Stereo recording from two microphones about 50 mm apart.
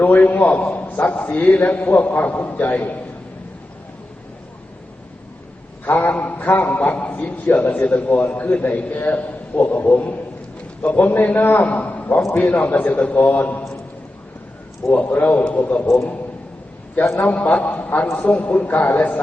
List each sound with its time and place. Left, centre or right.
0.0 s a man's voice: left
5.8 s a man's voice: left
15.0 s a man's voice: left
16.9 s a man's voice: left
17.2 s a man's voice: left